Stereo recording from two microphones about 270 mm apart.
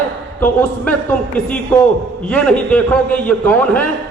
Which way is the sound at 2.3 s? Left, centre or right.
Centre.